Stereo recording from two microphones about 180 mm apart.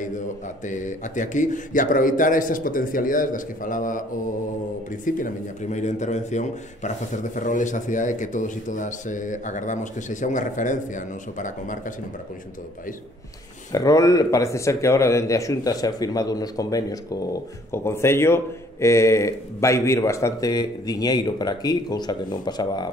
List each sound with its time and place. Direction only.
0.7 s speech: 45° left (ahead or behind)
5.0 s a man's voice: 45° left (ahead or behind)
13.7 s speech: 20° left (ahead or behind)